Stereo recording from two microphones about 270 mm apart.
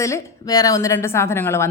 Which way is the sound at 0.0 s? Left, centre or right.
Centre.